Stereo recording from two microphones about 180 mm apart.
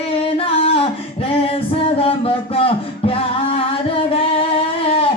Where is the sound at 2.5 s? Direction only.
30° left (ahead or behind).